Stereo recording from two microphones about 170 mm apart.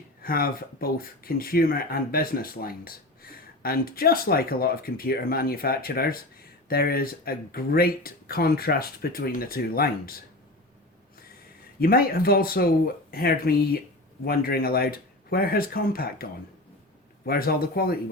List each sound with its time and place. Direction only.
0.2 s speech: 60° left (ahead or behind)
11.8 s speech: 60° left (ahead or behind)
17.2 s speech: 60° left (ahead or behind)